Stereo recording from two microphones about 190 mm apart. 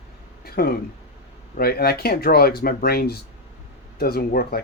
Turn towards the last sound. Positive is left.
turn(degrees=55)  # may be behind; listen again after turning